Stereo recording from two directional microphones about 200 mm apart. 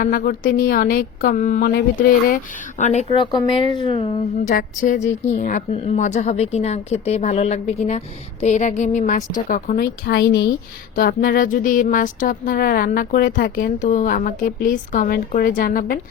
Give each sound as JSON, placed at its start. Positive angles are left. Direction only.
{"t": 0.0, "sound": "a woman's voice", "side_deg": 45}
{"t": 4.4, "sound": "a woman's voice", "side_deg": 40}